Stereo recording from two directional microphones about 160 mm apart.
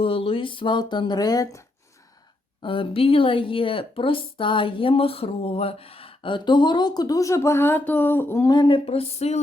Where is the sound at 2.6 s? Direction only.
35° left (ahead or behind).